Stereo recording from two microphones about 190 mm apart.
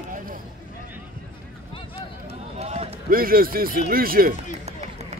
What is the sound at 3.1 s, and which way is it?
Speech, 50° right (ahead or behind).